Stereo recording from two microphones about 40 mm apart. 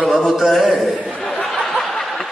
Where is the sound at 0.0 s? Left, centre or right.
Centre.